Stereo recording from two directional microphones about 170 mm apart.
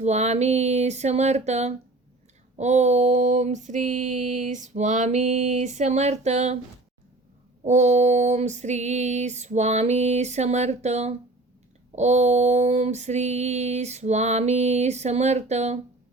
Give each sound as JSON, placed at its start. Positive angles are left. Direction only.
{"t": 0.0, "sound": "female singing", "side_deg": -40}
{"t": 2.6, "sound": "a sound", "side_deg": -40}
{"t": 7.6, "sound": "female singing", "side_deg": -45}